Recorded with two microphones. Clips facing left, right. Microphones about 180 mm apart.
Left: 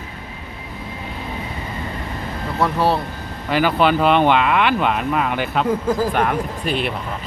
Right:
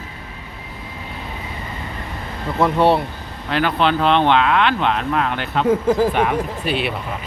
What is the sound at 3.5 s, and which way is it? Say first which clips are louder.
Speech: left 2 dB; 5° left (ahead or behind).